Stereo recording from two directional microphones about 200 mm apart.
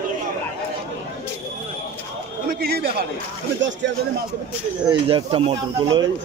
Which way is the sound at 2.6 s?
50° right (ahead or behind).